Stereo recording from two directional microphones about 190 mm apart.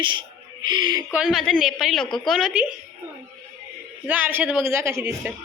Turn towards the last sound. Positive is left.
turn(degrees=-15)  # may be behind; listen again after turning